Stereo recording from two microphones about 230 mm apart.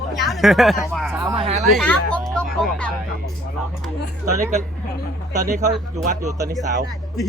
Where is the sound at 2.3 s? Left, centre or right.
Centre.